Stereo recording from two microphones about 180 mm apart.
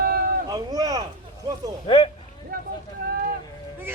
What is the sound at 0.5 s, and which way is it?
Vehicle, 20° right (ahead or behind).